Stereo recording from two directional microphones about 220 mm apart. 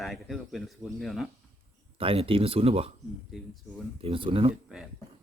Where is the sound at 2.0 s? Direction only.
25° right (ahead or behind).